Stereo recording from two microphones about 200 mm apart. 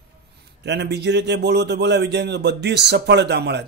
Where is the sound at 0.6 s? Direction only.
55° right (ahead or behind).